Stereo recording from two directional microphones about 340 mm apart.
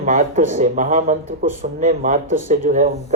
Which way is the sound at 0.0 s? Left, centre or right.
Right.